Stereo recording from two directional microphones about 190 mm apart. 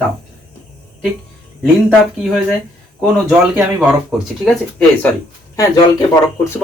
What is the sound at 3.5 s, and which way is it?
Speech, 5° right (ahead or behind).